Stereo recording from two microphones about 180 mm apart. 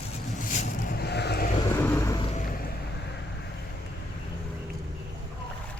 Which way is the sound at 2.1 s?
35° left (ahead or behind).